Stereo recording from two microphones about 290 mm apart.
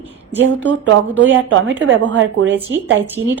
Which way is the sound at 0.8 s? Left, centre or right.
Right.